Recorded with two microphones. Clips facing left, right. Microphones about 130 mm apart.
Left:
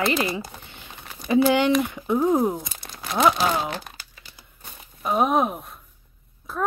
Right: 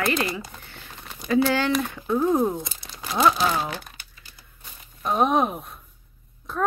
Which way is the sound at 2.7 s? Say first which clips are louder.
Left 2 dB; 60° left (ahead or behind).